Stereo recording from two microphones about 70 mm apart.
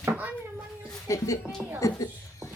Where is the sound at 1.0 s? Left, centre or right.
Left.